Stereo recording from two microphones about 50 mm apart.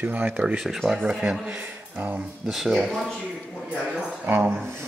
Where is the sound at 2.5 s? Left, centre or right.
Centre.